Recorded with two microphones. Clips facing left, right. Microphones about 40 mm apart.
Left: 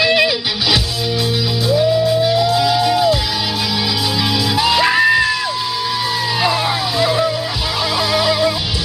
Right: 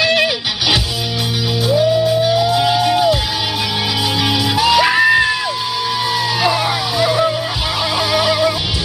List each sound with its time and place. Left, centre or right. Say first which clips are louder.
2.4 s music: even; right
4.6 s music: right 1 dB; centre
6.5 s vehicle: even; centre
8.1 s music: right 1 dB; centre